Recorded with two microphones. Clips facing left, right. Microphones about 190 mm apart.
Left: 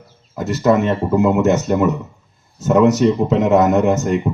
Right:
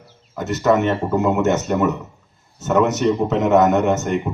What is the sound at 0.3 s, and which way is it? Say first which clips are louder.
Speech: left 2 dB; 30° left (ahead or behind).